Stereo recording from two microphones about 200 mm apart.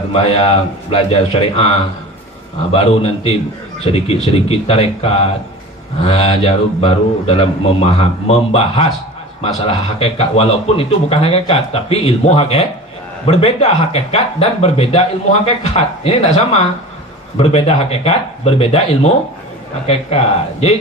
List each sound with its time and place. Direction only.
0.1 s speech: 30° left (ahead or behind)
2.7 s speech: 30° left (ahead or behind)